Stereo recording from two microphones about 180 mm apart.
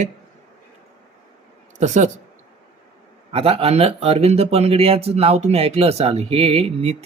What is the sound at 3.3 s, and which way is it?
Speech, 35° right (ahead or behind).